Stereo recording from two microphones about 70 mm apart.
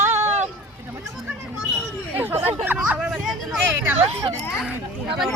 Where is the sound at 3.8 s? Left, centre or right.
Right.